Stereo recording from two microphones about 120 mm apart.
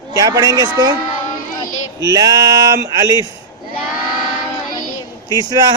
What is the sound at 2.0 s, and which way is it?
Speech, 35° right (ahead or behind).